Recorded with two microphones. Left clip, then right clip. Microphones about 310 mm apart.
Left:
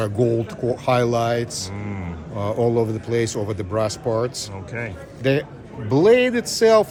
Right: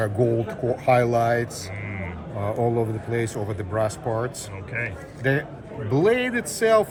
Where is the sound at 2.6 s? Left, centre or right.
Centre.